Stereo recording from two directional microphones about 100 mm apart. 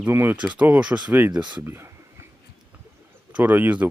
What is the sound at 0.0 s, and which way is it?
Speech, 20° right (ahead or behind).